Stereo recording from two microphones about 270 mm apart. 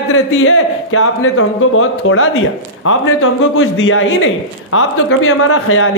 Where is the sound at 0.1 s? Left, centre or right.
Left.